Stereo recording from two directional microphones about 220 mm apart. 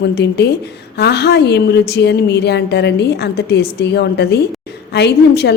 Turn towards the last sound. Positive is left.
turn(degrees=50)  # may be behind; listen again after turning